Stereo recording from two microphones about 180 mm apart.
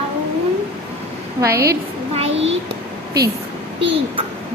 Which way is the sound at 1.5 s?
60° right (ahead or behind).